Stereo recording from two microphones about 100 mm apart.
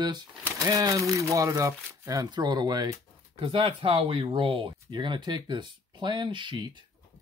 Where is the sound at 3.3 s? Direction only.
80° right.